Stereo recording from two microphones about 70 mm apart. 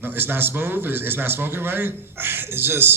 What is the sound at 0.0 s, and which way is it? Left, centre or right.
A man's voice, right.